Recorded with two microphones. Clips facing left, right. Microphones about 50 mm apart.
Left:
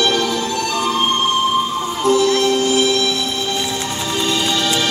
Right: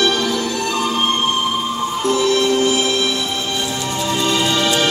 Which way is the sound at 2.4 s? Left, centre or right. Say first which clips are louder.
Left 1 dB; right.